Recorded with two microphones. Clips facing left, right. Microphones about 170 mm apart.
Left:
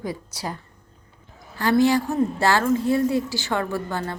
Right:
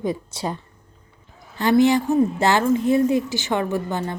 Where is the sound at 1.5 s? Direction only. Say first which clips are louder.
Right 2 dB; 20° right (ahead or behind).